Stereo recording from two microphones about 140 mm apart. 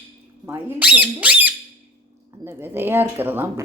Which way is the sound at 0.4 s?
15° right (ahead or behind).